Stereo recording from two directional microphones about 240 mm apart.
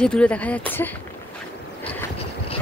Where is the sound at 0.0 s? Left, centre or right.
Centre.